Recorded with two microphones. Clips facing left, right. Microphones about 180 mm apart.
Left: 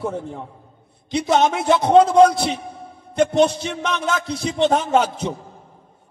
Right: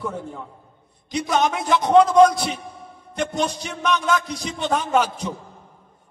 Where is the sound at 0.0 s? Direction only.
25° left (ahead or behind).